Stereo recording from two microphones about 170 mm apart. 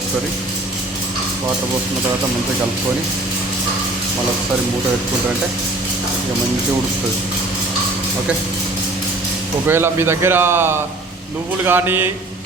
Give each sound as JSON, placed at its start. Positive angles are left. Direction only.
{"t": 9.6, "sound": "speech", "side_deg": -15}